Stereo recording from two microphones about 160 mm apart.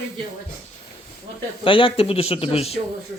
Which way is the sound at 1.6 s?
35° left (ahead or behind).